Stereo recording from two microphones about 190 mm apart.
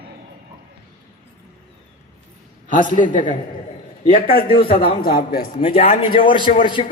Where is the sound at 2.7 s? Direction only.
45° left (ahead or behind).